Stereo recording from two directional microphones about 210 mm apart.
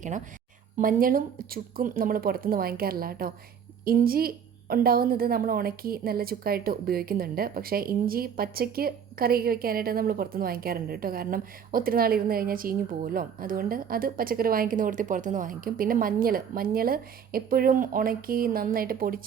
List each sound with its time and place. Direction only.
0.8 s a woman's voice: 40° right (ahead or behind)